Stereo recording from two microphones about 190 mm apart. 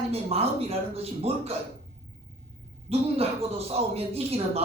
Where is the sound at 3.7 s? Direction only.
30° right (ahead or behind).